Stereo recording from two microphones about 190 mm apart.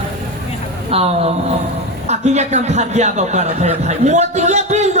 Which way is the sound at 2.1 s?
35° right (ahead or behind).